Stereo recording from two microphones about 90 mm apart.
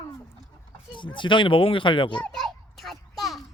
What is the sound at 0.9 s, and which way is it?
Speech, 65° left (ahead or behind).